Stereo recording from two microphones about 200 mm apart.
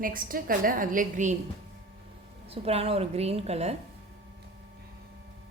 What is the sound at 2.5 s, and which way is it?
Speech, 30° right (ahead or behind).